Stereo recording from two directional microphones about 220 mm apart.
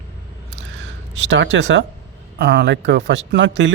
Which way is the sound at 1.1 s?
55° right (ahead or behind).